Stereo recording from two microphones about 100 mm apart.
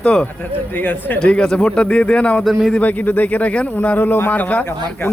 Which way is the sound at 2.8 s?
15° left (ahead or behind).